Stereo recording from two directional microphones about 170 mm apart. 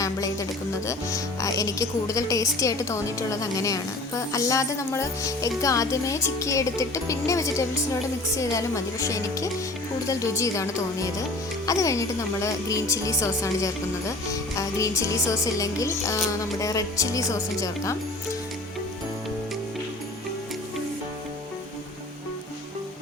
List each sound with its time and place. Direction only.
0.0 s speech: 20° left (ahead or behind)